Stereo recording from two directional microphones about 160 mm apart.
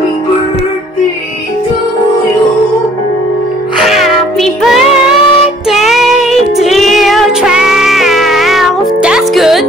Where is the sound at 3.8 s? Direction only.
Centre (ahead or behind).